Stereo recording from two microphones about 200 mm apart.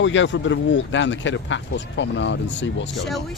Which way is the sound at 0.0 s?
70° left (ahead or behind).